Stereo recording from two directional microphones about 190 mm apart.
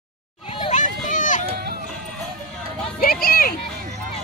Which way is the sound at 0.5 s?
30° left (ahead or behind).